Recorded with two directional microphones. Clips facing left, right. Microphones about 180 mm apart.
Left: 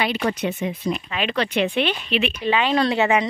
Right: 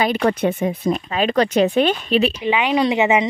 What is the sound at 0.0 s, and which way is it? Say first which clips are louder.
Speech: right 5 dB; 50° right (ahead or behind).